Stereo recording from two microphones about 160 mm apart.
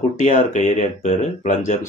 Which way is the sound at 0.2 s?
45° left (ahead or behind).